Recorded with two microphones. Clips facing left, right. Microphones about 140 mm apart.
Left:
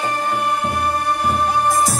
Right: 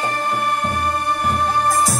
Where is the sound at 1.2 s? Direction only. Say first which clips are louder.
Left 1 dB; 10° left (ahead or behind).